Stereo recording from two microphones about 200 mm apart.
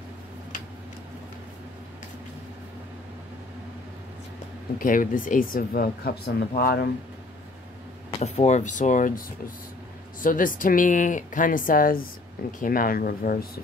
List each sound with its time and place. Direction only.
4.7 s speech: 45° left (ahead or behind)
8.1 s speech: 35° left (ahead or behind)
10.2 s speech: 40° left (ahead or behind)